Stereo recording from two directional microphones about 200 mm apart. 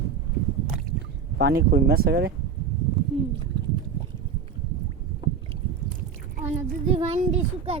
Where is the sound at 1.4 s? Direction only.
50° right (ahead or behind).